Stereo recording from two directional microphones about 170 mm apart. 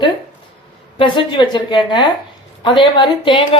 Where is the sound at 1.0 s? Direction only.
30° left (ahead or behind).